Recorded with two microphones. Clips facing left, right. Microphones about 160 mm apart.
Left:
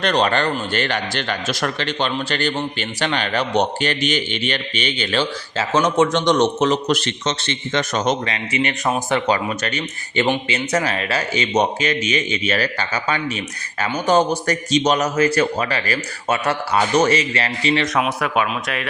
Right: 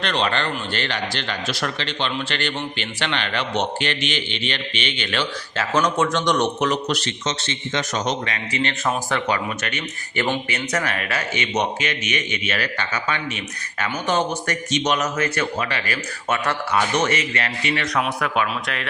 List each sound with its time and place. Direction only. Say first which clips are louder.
0.0 s a man's voice: left 5 dB; 45° left (ahead or behind); by 6.7 s 25° left (ahead or behind)
6.8 s a man's voice: left 4 dB; 50° left (ahead or behind)
8.5 s a man's voice: left 3 dB; 15° left (ahead or behind)